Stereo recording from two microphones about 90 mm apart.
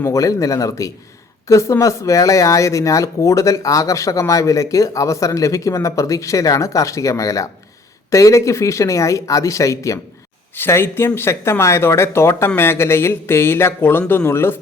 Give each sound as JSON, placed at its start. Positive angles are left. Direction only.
{"t": 0.1, "sound": "speech", "side_deg": 35}
{"t": 10.5, "sound": "speech", "side_deg": 25}